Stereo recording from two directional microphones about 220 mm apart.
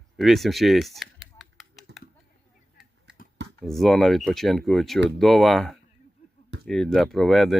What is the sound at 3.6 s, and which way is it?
Speech, centre (ahead or behind).